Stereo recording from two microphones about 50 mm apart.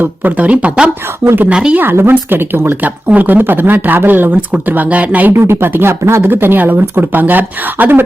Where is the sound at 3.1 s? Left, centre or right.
Right.